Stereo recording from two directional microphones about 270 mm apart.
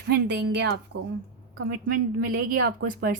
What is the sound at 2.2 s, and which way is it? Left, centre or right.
Speech, right.